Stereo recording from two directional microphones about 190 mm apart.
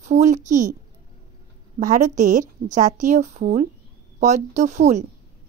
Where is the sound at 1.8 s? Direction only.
40° right (ahead or behind).